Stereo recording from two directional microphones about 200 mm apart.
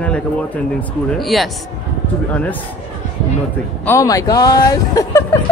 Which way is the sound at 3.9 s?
15° left (ahead or behind).